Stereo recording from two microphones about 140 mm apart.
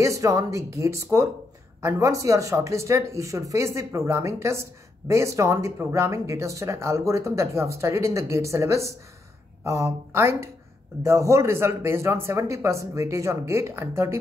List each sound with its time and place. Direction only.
0.0 s speech: 25° right (ahead or behind)